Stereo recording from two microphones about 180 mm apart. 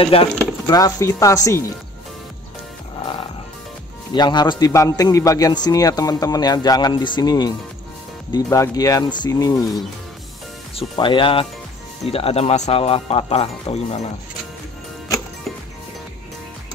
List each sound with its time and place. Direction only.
0.0 s speech: 30° left (ahead or behind)
0.7 s speech: 20° left (ahead or behind)
4.1 s a man's voice: 25° left (ahead or behind)
10.8 s a man's voice: 25° left (ahead or behind)